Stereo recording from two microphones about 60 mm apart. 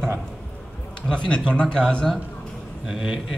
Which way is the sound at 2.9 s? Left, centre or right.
Centre.